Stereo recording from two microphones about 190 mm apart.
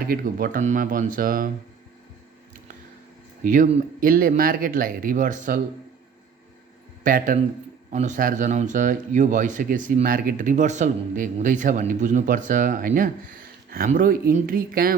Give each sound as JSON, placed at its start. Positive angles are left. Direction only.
{"t": 0.1, "sound": "speech", "side_deg": -50}
{"t": 3.4, "sound": "speech", "side_deg": -45}
{"t": 7.0, "sound": "speech", "side_deg": -45}